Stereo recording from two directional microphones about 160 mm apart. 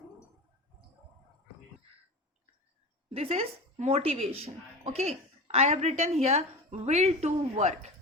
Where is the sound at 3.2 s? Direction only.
40° right (ahead or behind).